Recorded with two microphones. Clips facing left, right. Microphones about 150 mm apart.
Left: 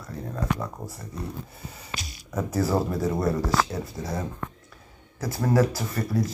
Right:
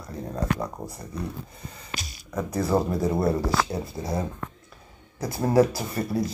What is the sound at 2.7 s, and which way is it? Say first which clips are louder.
Speech: right 6 dB; 15° right (ahead or behind).